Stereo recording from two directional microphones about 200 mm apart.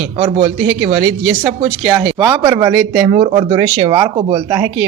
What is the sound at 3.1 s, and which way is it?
Speech, 30° right (ahead or behind).